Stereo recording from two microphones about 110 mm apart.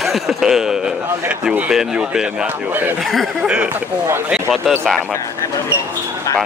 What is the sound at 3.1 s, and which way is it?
Speech, centre (ahead or behind).